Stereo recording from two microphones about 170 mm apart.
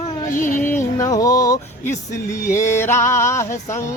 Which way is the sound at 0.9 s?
20° left (ahead or behind).